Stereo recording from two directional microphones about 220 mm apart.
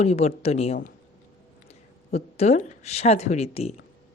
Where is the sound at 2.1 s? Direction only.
30° left (ahead or behind).